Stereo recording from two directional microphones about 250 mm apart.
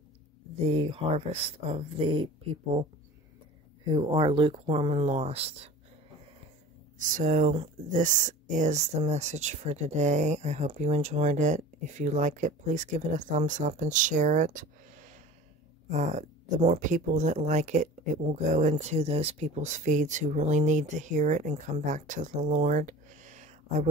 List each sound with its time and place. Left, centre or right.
0.7 s speech: right
3.8 s speech: centre
7.0 s speech: right